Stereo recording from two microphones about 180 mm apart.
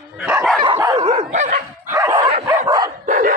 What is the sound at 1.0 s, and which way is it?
Dog, 40° right (ahead or behind).